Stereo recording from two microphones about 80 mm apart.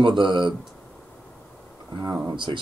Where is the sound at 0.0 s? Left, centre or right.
Right.